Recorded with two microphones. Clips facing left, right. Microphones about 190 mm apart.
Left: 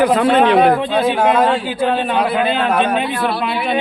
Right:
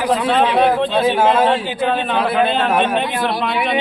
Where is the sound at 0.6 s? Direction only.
10° left (ahead or behind).